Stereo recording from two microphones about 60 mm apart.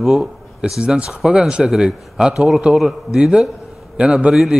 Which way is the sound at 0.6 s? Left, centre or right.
Centre.